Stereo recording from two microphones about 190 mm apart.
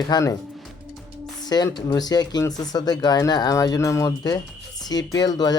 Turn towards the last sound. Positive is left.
turn(degrees=20)  # may be behind; listen again after turning